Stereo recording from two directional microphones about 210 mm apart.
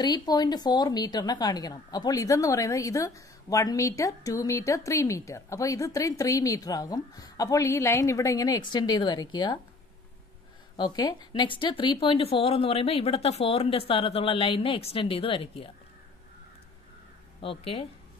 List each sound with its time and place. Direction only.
0.0 s a woman's voice: 20° left (ahead or behind)
10.8 s speech: 20° left (ahead or behind)
17.4 s speech: 25° left (ahead or behind)